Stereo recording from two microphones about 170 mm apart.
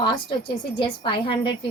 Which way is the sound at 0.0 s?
30° left (ahead or behind).